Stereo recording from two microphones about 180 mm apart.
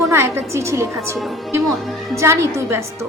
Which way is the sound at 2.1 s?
15° right (ahead or behind).